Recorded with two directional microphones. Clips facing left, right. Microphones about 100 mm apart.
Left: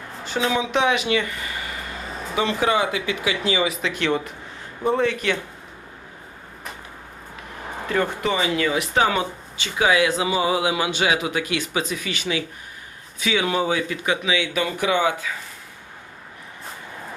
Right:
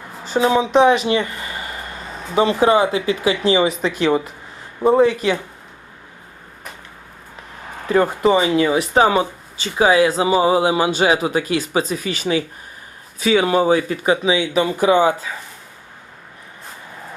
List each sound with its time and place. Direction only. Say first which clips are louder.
0.3 s speech: right 7 dB; 30° right (ahead or behind)
7.9 s speech: right 8 dB; 35° right (ahead or behind)